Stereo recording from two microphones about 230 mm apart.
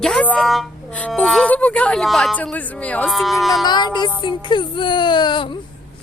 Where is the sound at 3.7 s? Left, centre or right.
Centre.